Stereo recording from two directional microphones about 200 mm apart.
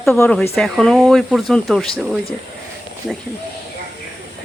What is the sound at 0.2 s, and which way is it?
Speech, 5° left (ahead or behind).